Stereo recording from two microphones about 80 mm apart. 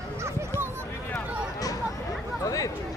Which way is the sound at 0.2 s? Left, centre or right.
Right.